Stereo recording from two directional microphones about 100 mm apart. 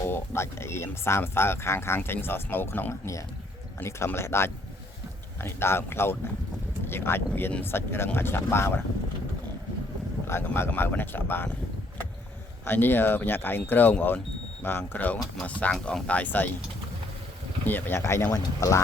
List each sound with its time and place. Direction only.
0.1 s speech: 25° left (ahead or behind)
10.2 s speech: 25° left (ahead or behind)
12.6 s speech: 20° left (ahead or behind)
17.7 s speech: 20° left (ahead or behind)